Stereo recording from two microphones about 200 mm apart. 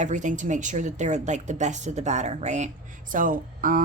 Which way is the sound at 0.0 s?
40° right (ahead or behind).